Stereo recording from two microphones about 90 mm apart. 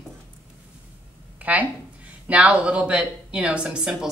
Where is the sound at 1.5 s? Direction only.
15° right (ahead or behind).